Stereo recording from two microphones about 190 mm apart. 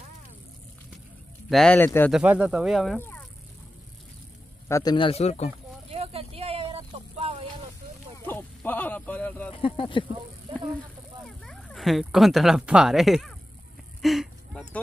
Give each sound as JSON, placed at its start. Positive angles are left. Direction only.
{"t": 1.5, "sound": "speech", "side_deg": 5}
{"t": 3.0, "sound": "vehicle", "side_deg": 10}
{"t": 4.6, "sound": "a man's voice", "side_deg": 15}
{"t": 4.9, "sound": "speech", "side_deg": 30}
{"t": 5.9, "sound": "vehicle", "side_deg": -30}
{"t": 8.3, "sound": "speech", "side_deg": 10}
{"t": 9.5, "sound": "speech", "side_deg": 25}
{"t": 11.2, "sound": "speech", "side_deg": 0}
{"t": 14.0, "sound": "a sound", "side_deg": 0}